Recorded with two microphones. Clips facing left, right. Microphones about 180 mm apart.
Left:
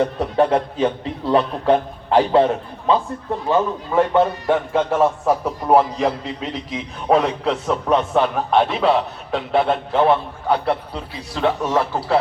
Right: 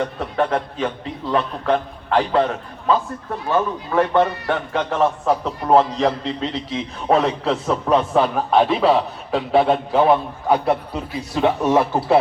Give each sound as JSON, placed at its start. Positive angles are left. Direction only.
{"t": 0.0, "sound": "a man's voice", "side_deg": 35}
{"t": 3.5, "sound": "a man's voice", "side_deg": 15}